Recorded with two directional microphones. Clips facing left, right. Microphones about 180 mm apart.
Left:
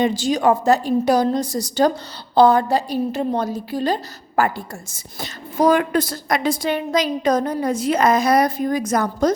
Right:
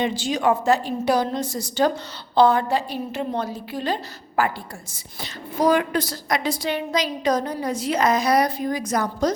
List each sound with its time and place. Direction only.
0.0 s a woman's voice: 40° left (ahead or behind)